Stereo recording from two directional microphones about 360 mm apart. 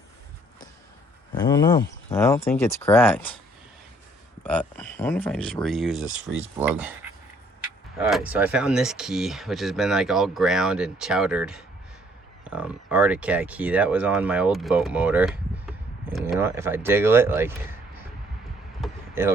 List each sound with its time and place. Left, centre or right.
1.3 s speech: centre
4.4 s speech: centre
7.9 s speech: centre
18.8 s basketball bounce: centre